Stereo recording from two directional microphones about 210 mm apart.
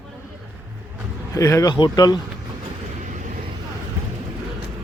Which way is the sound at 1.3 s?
15° left (ahead or behind).